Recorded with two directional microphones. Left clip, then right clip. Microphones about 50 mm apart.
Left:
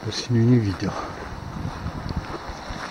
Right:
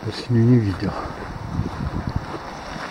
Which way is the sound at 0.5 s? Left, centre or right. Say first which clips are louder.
Right 2 dB; centre.